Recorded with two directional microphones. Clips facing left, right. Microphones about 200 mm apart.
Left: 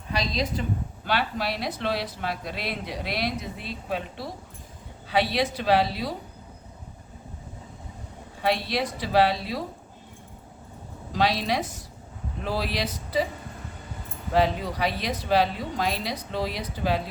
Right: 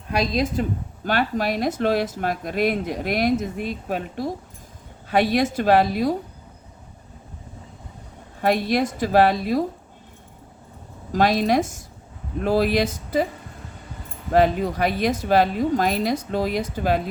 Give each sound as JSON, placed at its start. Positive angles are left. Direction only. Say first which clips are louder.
{"t": 0.1, "sound": "speech", "louder": "right 6 dB", "side_deg": -55}
{"t": 8.4, "sound": "speech", "louder": "right 5 dB", "side_deg": -50}
{"t": 11.1, "sound": "speech", "louder": "right 6 dB", "side_deg": -50}
{"t": 14.3, "sound": "speech", "louder": "right 5 dB", "side_deg": -50}